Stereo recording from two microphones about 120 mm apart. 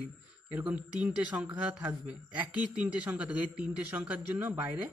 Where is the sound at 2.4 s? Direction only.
15° right (ahead or behind).